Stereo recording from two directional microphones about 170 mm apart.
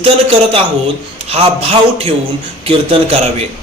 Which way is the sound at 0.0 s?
35° right (ahead or behind).